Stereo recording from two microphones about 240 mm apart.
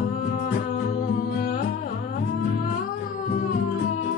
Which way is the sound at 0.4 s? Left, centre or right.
Left.